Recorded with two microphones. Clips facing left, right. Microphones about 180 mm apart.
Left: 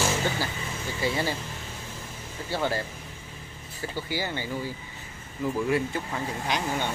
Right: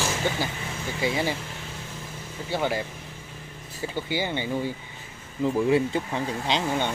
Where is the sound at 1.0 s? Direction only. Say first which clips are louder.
Right 2 dB; 15° right (ahead or behind).